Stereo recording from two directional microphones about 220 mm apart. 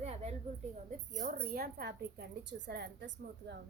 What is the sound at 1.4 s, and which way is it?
A woman's voice, 45° right (ahead or behind).